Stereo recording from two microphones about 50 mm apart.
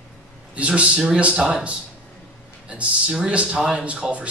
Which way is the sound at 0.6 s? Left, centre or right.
Right.